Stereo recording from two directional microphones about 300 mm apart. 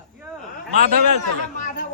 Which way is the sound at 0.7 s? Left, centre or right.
Right.